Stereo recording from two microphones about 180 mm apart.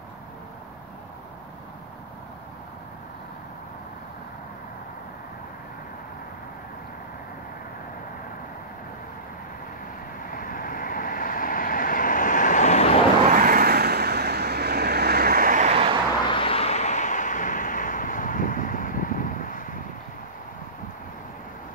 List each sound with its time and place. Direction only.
10.3 s vehicle: 50° left (ahead or behind)
13.3 s vehicle: 50° right (ahead or behind)
15.7 s vehicle: 35° right (ahead or behind)
16.3 s vehicle: 30° left (ahead or behind); by 19.7 s 50° left (ahead or behind)